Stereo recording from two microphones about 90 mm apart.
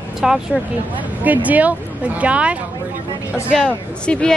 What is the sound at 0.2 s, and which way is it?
Speech, 5° right (ahead or behind).